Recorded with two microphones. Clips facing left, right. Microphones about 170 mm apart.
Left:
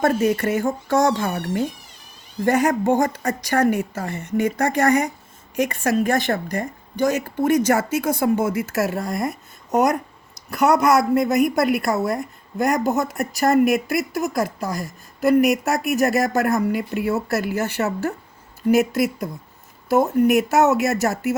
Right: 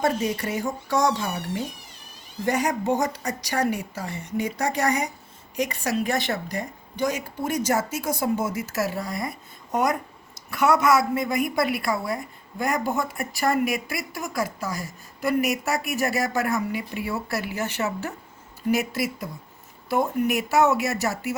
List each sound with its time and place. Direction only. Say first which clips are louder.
0.0 s a woman's voice: left 6 dB; 55° left (ahead or behind)
7.2 s a woman's voice: left 8 dB; 60° left (ahead or behind)